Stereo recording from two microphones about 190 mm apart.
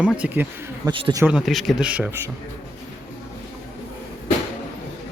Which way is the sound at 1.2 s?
5° right (ahead or behind).